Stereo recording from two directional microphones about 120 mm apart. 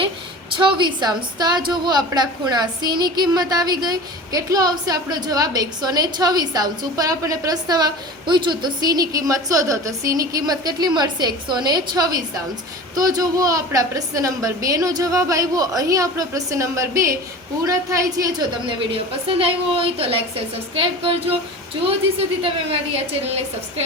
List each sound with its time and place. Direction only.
0.5 s a woman's voice: 45° right (ahead or behind)
18.6 s a woman's voice: 50° right (ahead or behind)
23.2 s a woman's voice: 60° right (ahead or behind)